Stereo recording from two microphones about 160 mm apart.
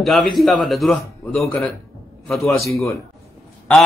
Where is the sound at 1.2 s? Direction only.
15° left (ahead or behind).